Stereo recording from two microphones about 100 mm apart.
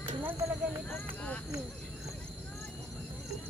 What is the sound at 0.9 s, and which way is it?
Speech, 15° left (ahead or behind).